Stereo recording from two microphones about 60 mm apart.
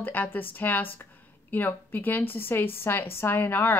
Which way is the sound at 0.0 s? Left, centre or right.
Left.